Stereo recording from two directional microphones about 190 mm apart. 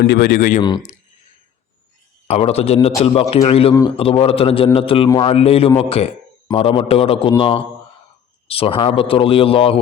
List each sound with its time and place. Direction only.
0.0 s speech: 55° left (ahead or behind)
2.2 s speech: 35° left (ahead or behind)